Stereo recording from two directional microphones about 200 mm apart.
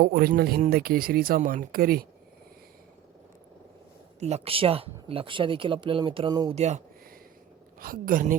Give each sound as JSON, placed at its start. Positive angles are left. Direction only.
{"t": 0.0, "sound": "speech", "side_deg": -50}
{"t": 4.2, "sound": "speech", "side_deg": -30}
{"t": 6.5, "sound": "speech", "side_deg": -35}
{"t": 7.8, "sound": "speech", "side_deg": -45}